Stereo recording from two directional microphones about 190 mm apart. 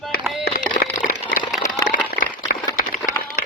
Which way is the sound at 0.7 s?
45° left (ahead or behind).